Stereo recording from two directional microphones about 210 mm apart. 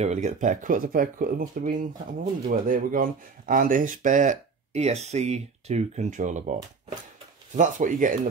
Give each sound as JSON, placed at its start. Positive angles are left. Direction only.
{"t": 0.0, "sound": "speech", "side_deg": -35}
{"t": 7.5, "sound": "speech", "side_deg": -35}